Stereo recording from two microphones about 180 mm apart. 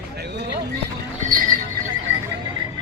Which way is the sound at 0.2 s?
65° right (ahead or behind).